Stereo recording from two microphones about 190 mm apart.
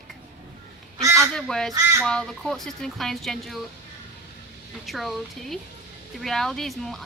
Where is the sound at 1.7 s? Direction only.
15° right (ahead or behind).